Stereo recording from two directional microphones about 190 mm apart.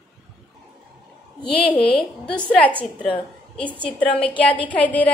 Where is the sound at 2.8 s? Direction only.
5° left (ahead or behind).